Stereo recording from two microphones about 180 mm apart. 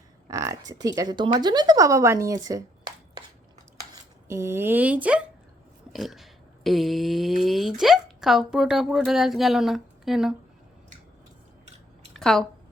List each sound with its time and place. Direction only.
0.3 s speech: 15° right (ahead or behind)
4.3 s speech: 15° right (ahead or behind)
12.1 s a sound: 5° left (ahead or behind)